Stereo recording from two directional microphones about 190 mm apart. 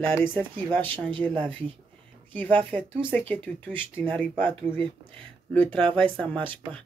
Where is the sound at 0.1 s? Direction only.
10° left (ahead or behind).